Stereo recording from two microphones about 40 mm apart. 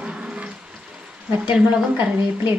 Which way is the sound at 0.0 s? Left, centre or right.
Right.